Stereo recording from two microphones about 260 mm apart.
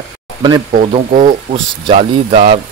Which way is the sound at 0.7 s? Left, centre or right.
Right.